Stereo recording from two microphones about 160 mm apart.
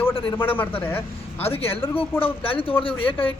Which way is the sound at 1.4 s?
40° left (ahead or behind).